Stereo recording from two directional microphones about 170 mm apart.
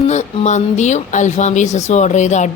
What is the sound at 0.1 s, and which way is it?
Speech, 45° left (ahead or behind).